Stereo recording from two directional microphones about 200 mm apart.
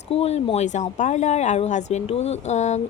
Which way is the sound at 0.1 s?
30° left (ahead or behind).